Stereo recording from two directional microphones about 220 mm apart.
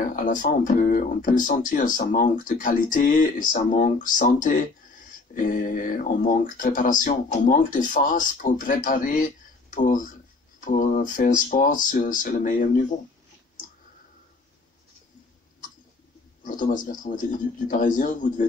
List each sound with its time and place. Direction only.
0.0 s speech: 35° left (ahead or behind)
16.4 s speech: 35° left (ahead or behind)